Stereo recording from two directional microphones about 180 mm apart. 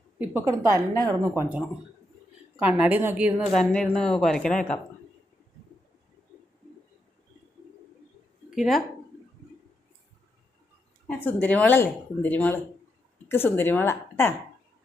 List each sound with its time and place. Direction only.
0.2 s a woman's voice: 15° right (ahead or behind); by 4.8 s 5° left (ahead or behind)
8.4 s speech: centre (ahead or behind)
11.0 s speech: 10° left (ahead or behind)